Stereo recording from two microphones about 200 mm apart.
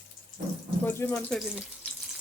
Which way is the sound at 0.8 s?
10° left (ahead or behind).